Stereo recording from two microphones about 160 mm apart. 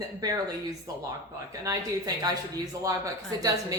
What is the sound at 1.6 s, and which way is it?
Speech, 20° right (ahead or behind).